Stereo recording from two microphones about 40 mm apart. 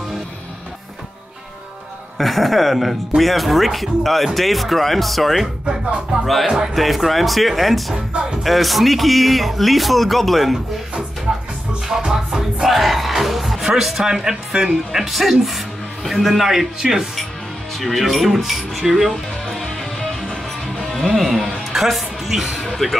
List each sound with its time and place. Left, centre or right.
2.1 s speech: centre
6.4 s speech: centre
6.7 s speech: centre
7.9 s speech: right
8.5 s speech: centre
12.0 s music: centre
12.6 s speech: centre
17.7 s speech: centre
19.4 s music: centre
20.8 s a man's voice: centre
22.7 s speech: centre